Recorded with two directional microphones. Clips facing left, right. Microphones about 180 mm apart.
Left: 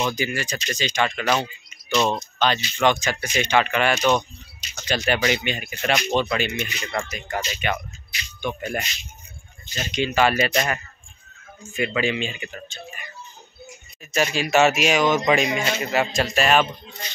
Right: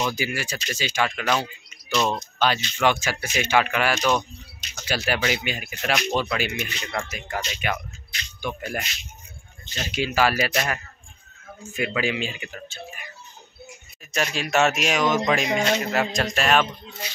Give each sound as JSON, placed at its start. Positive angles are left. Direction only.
{"t": 0.0, "sound": "speech", "side_deg": -5}
{"t": 8.4, "sound": "speech", "side_deg": -5}
{"t": 14.1, "sound": "speech", "side_deg": 0}